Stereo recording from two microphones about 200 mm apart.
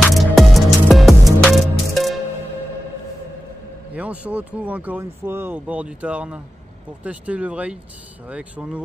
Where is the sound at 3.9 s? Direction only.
5° right (ahead or behind).